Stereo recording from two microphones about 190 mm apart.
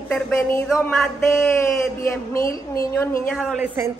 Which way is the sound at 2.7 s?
15° left (ahead or behind).